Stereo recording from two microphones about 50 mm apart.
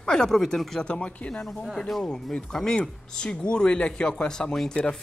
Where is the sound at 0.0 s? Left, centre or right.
Centre.